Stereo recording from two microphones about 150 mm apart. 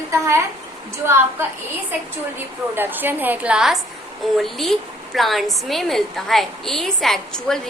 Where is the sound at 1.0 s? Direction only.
15° right (ahead or behind).